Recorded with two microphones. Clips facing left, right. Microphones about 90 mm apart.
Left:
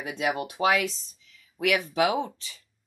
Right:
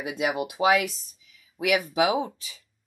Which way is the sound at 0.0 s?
5° right (ahead or behind).